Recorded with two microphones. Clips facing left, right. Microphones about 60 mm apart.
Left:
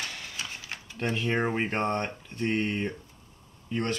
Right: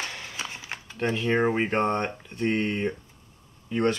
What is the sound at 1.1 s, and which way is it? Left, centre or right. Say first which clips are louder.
Speech: right 4 dB; centre.